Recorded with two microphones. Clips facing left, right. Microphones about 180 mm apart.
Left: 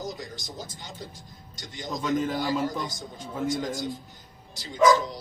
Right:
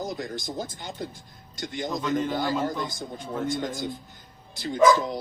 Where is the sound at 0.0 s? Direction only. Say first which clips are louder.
Right 4 dB; 55° right (ahead or behind).